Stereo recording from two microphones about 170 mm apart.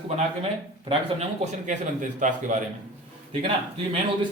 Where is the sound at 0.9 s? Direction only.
35° right (ahead or behind).